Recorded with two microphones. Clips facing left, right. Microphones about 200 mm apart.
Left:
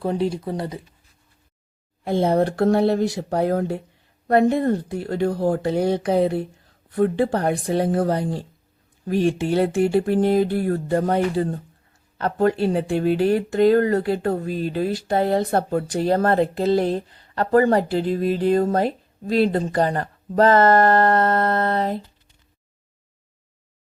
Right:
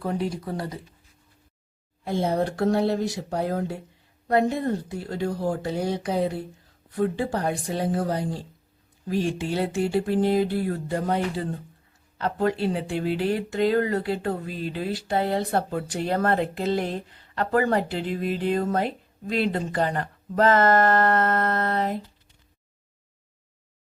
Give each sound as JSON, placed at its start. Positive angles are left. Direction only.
{"t": 0.0, "sound": "speech", "side_deg": 25}
{"t": 2.0, "sound": "speech", "side_deg": 60}